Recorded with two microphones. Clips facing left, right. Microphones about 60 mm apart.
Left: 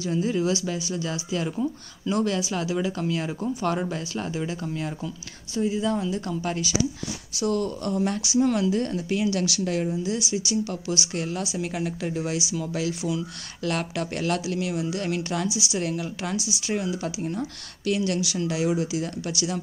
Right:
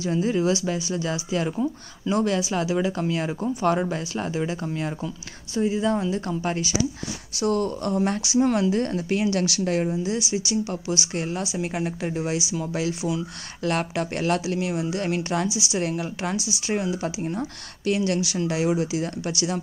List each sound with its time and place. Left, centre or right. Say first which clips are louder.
0.0 s speech: right 2 dB; right
10.6 s speech: right 1 dB; right